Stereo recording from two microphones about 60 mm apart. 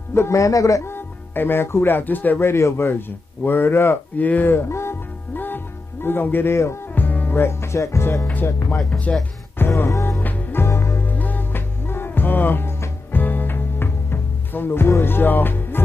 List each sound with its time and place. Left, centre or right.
0.1 s a man's voice: left
0.8 s speech: left
2.4 s speech: left
4.2 s speech: left
5.3 s music: left
6.0 s speech: left
7.0 s speech: left
9.1 s speech: centre
9.6 s music: left
9.8 s a man's voice: left
10.2 s music: left
10.6 s music: left
11.1 s music: left